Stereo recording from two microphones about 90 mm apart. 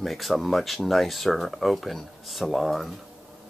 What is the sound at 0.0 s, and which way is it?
Speech, centre (ahead or behind).